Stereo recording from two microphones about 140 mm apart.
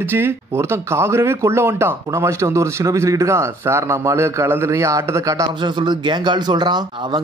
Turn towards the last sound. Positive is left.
turn(degrees=-30)  # may be behind; listen again after turning